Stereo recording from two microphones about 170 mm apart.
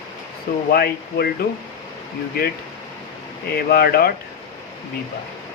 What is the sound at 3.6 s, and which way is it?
Speech, 65° left (ahead or behind).